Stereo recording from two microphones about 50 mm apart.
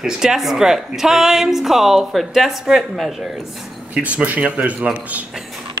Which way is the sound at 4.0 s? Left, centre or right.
Right.